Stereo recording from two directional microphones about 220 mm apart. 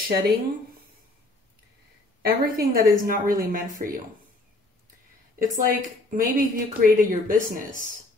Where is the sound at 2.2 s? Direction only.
40° right (ahead or behind).